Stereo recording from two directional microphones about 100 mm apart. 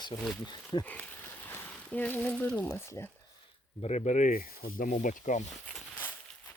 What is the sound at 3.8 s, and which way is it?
Speech, 90° left.